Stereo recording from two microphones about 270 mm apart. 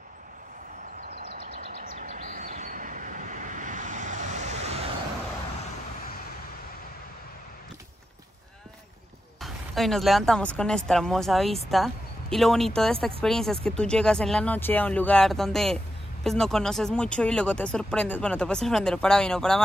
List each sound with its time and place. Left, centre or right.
1.0 s train: right
9.4 s speech: centre